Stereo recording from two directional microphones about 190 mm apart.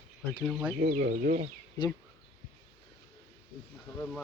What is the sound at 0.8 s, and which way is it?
Speech, 50° right (ahead or behind).